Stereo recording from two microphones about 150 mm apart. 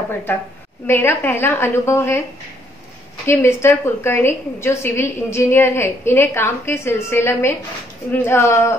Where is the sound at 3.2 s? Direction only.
15° left (ahead or behind).